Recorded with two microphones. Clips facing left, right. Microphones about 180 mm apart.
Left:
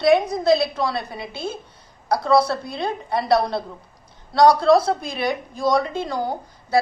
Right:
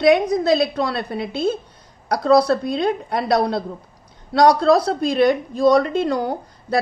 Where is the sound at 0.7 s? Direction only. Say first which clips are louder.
Right 2 dB; 65° right (ahead or behind).